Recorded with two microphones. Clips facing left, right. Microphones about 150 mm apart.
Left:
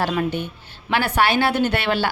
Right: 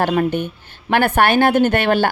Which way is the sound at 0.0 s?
50° right (ahead or behind).